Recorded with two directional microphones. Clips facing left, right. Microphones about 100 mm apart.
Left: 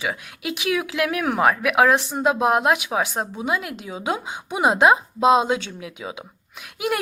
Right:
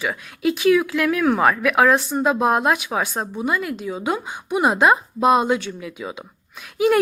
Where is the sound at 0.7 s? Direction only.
20° left (ahead or behind).